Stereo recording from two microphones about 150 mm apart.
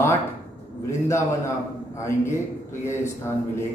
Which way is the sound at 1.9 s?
20° left (ahead or behind).